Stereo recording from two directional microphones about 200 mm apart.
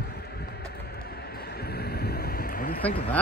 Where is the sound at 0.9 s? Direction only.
50° left (ahead or behind).